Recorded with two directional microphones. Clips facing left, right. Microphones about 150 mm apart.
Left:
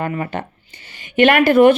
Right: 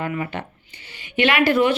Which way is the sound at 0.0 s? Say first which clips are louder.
Left 3 dB; 45° left (ahead or behind).